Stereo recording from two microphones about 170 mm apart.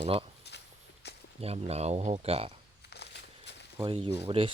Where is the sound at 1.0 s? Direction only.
80° left.